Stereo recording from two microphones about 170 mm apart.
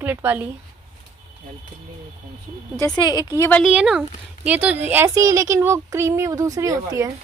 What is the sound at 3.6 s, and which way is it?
Speech, 5° right (ahead or behind).